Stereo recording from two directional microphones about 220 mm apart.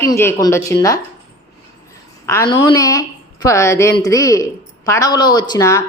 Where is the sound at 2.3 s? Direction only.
15° left (ahead or behind).